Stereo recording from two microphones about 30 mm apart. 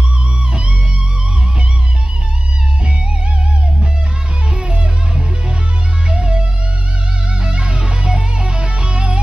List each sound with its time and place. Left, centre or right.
0.5 s music: right
4.6 s music: right
7.4 s music: right